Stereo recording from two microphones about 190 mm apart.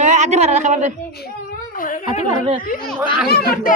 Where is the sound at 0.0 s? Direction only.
40° right (ahead or behind).